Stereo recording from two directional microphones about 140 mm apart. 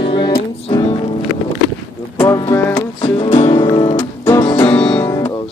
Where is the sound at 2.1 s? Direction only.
20° left (ahead or behind).